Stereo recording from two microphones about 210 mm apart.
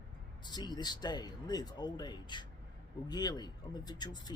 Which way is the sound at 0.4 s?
20° left (ahead or behind).